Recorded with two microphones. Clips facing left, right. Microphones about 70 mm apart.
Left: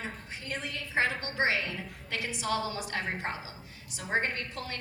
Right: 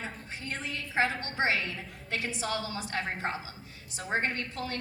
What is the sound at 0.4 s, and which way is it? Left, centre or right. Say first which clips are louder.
A woman's voice: even; right.